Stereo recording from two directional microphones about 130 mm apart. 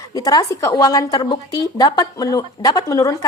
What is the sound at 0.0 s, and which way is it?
A woman's voice, 30° left (ahead or behind).